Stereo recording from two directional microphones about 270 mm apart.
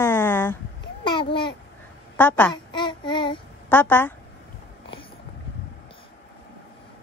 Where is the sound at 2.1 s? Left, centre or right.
Centre.